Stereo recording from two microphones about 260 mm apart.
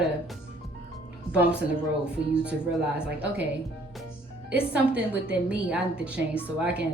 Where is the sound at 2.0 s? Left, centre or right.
Centre.